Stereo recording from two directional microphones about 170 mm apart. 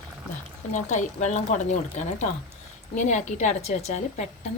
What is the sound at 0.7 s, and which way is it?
Speech, 45° left (ahead or behind).